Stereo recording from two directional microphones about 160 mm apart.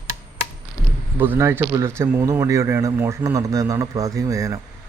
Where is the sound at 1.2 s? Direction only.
15° right (ahead or behind).